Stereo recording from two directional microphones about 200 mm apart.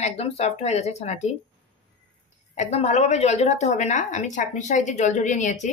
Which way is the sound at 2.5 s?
35° left (ahead or behind).